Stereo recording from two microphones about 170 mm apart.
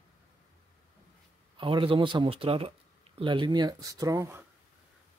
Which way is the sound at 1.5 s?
30° right (ahead or behind).